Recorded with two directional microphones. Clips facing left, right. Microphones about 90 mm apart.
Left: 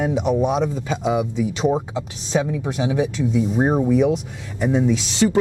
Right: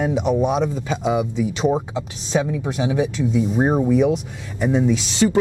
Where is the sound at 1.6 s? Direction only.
20° right (ahead or behind).